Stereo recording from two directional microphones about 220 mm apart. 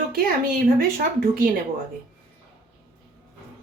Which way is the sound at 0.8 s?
40° right (ahead or behind).